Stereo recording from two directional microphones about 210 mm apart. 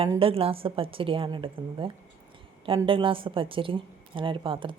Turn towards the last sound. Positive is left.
turn(degrees=-25)  # may be behind; listen again after turning